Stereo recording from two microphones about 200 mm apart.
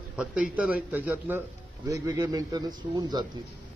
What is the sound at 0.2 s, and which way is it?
Speech, 5° right (ahead or behind).